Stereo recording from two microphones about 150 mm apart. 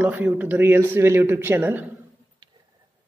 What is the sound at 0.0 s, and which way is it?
Speech, 10° right (ahead or behind).